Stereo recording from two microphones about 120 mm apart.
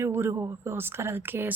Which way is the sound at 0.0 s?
20° right (ahead or behind).